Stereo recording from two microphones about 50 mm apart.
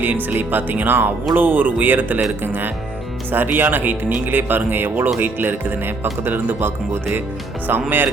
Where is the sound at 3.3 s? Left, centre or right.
Right.